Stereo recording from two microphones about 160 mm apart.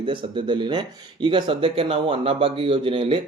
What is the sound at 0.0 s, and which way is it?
Speech, 30° right (ahead or behind).